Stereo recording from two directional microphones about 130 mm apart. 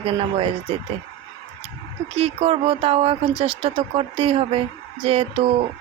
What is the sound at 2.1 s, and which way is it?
Speech, 50° right (ahead or behind).